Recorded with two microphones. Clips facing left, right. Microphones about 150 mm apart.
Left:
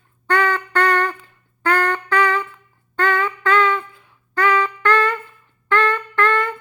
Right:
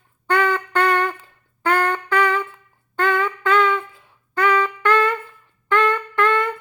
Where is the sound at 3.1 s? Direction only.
Centre (ahead or behind).